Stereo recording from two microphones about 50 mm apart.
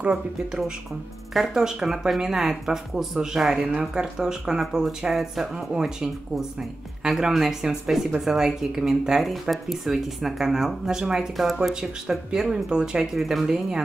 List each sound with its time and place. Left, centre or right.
0.0 s speech: right
1.3 s speech: centre
7.0 s speech: centre